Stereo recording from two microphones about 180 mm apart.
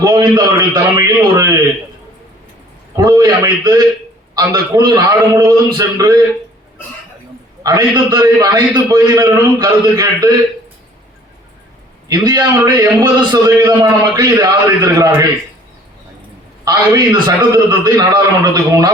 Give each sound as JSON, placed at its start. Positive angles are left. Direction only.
{"t": 0.0, "sound": "a man's voice", "side_deg": -20}
{"t": 2.9, "sound": "a man's voice", "side_deg": -20}
{"t": 7.6, "sound": "a man's voice", "side_deg": -20}
{"t": 12.0, "sound": "a man's voice", "side_deg": -20}
{"t": 16.6, "sound": "a man's voice", "side_deg": -20}